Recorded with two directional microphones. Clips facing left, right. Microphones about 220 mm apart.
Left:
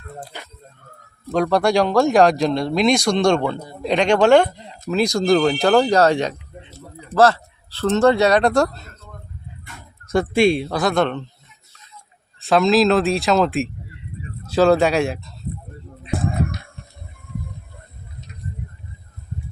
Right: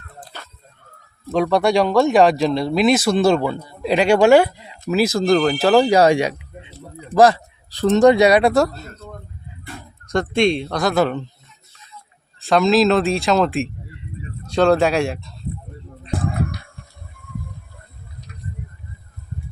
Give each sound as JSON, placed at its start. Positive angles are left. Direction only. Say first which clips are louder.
{"t": 0.3, "sound": "dog", "louder": "left 2 dB", "side_deg": 15}
{"t": 1.3, "sound": "speech", "louder": "right 1 dB", "side_deg": 0}
{"t": 10.1, "sound": "speech", "louder": "left 1 dB", "side_deg": 5}
{"t": 12.4, "sound": "speech", "louder": "even", "side_deg": 0}
{"t": 17.2, "sound": "a sound", "louder": "right 1 dB", "side_deg": 20}